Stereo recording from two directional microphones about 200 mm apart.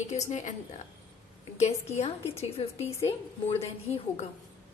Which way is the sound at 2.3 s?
30° left (ahead or behind).